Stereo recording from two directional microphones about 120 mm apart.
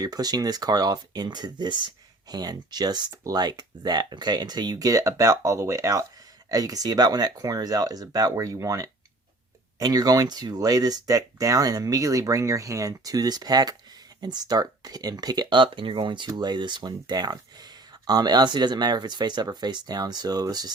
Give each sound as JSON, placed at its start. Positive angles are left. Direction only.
{"t": 0.0, "sound": "speech", "side_deg": -35}